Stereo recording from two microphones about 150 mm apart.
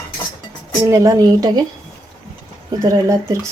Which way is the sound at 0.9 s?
25° right (ahead or behind).